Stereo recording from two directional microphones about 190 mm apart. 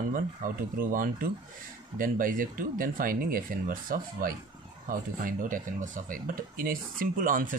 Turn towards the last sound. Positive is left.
turn(degrees=-45)  # may be behind; listen again after turning